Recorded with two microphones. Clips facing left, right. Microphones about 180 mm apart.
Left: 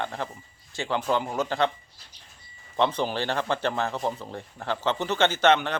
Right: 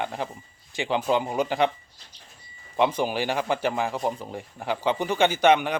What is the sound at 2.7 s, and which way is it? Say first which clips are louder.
A man's voice: right 2 dB; 10° right (ahead or behind).